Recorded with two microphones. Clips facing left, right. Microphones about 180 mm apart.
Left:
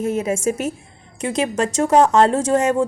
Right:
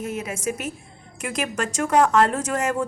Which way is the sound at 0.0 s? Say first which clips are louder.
Left 8 dB; 30° left (ahead or behind).